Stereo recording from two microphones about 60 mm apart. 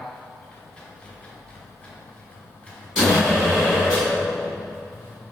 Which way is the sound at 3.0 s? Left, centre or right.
Centre.